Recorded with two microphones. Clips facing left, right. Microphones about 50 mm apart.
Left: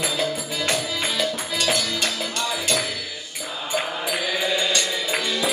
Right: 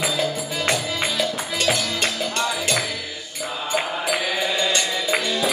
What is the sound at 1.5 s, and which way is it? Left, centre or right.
Music, right.